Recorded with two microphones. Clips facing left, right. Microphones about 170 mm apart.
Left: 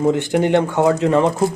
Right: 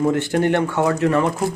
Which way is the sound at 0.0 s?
15° left (ahead or behind).